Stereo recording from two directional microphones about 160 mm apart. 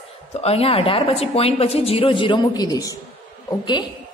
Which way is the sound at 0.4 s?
40° left (ahead or behind).